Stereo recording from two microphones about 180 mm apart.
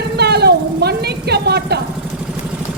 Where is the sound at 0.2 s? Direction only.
65° right (ahead or behind).